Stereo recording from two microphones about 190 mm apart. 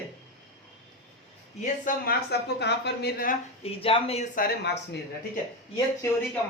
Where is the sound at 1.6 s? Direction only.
50° left (ahead or behind).